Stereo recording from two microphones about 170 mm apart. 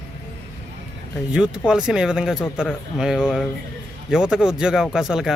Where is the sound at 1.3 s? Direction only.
5° right (ahead or behind).